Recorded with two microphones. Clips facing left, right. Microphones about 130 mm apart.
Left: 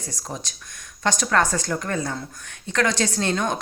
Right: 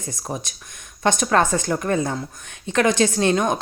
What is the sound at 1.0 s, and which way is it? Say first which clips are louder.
Speech: right 3 dB; 20° right (ahead or behind).